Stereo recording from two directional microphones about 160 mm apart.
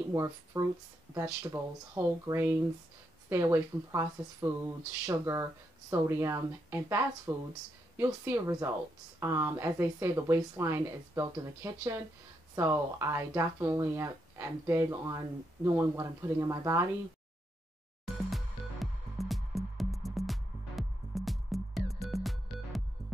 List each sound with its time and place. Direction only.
0.1 s speech: 20° right (ahead or behind)
18.3 s music: centre (ahead or behind)